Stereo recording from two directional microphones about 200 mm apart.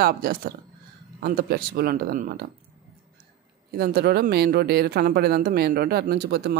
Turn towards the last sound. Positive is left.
turn(degrees=-55)  # may be behind; listen again after turning